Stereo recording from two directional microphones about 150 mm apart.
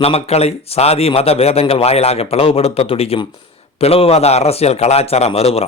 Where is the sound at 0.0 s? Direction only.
40° left (ahead or behind).